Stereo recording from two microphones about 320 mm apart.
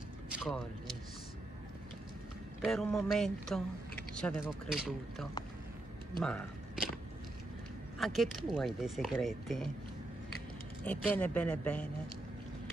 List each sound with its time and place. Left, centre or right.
0.3 s a sound: centre
2.6 s speech: centre
8.0 s speech: centre
10.8 s speech: centre